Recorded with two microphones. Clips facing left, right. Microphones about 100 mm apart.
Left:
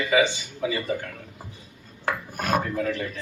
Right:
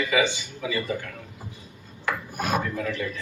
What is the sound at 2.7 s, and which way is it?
Speech, 35° left (ahead or behind).